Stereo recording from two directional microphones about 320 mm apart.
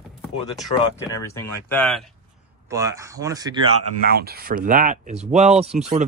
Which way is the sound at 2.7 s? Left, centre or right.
Centre.